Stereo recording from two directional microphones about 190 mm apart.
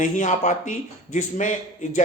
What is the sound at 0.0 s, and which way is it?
A woman's voice, 40° left (ahead or behind).